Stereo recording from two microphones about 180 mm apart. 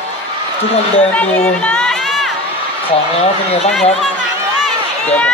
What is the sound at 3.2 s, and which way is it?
Speech, 35° left (ahead or behind).